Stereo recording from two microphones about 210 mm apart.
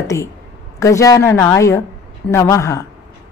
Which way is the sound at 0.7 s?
15° left (ahead or behind).